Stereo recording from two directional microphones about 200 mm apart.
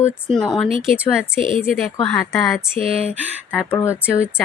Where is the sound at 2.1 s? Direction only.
Centre (ahead or behind).